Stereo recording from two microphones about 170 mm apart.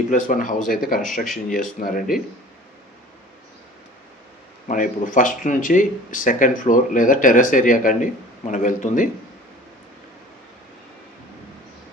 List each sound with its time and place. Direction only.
0.1 s speech: 50° left (ahead or behind)
1.1 s speech: centre (ahead or behind)
1.5 s speech: 50° left (ahead or behind)
4.7 s speech: 50° left (ahead or behind)